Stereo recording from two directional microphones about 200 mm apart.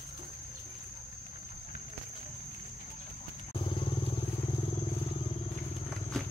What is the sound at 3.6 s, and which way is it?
Vehicle, 25° left (ahead or behind).